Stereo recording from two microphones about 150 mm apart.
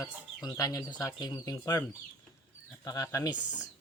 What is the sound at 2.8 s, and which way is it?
Speech, 25° left (ahead or behind).